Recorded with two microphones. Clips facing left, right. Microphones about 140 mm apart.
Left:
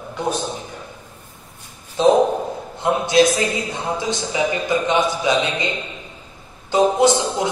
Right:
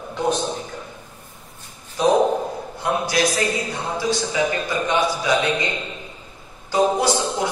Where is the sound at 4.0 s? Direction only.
20° left (ahead or behind).